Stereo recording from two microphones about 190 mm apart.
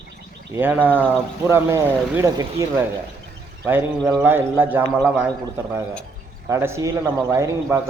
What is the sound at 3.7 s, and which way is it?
A man's voice, 10° right (ahead or behind).